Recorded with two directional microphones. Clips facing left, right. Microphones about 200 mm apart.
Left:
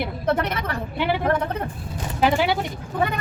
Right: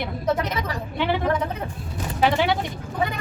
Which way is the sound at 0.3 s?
60° left (ahead or behind).